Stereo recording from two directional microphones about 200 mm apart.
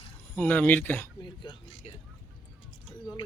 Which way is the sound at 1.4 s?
25° left (ahead or behind).